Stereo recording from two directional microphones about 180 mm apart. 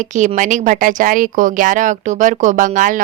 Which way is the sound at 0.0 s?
45° right (ahead or behind).